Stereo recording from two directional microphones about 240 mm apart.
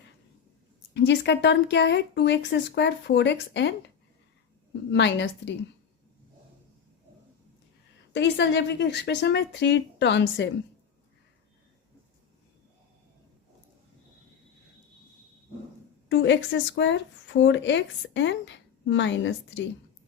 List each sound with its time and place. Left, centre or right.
0.9 s speech: left
4.9 s speech: left
8.1 s speech: left
16.0 s speech: left